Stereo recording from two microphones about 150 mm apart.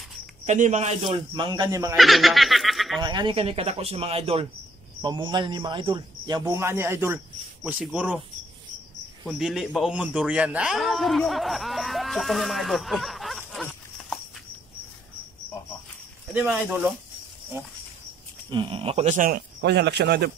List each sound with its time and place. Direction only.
0.5 s speech: 50° right (ahead or behind); by 2.0 s 25° right (ahead or behind)
2.0 s snicker: centre (ahead or behind)
3.0 s speech: 30° right (ahead or behind)
6.5 s a man's voice: 15° right (ahead or behind)
7.6 s a man's voice: 5° right (ahead or behind)
9.3 s a man's voice: centre (ahead or behind)
16.3 s a man's voice: 10° right (ahead or behind)
18.5 s speech: 35° right (ahead or behind); by 19.4 s 65° right (ahead or behind)
19.9 s a man's voice: 90° right